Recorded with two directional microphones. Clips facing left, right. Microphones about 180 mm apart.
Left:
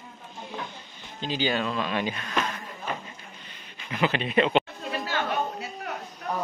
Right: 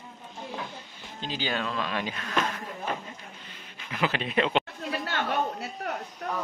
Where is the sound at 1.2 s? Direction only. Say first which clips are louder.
Left 4 dB; centre (ahead or behind).